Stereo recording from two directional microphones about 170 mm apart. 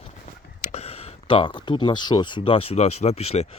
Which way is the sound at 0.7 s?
35° left (ahead or behind).